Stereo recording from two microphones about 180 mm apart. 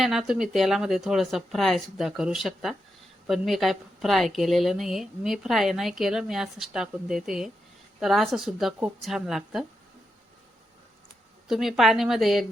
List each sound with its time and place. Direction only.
0.0 s a woman's voice: centre (ahead or behind)
11.4 s a woman's voice: centre (ahead or behind)